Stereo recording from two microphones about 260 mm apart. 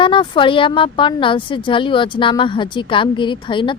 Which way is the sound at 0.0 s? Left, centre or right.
Centre.